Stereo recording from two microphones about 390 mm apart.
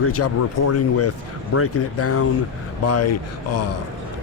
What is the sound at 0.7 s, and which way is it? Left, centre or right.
Speech, left.